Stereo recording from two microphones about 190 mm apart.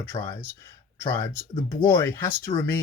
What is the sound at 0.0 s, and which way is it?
Speech, 10° left (ahead or behind).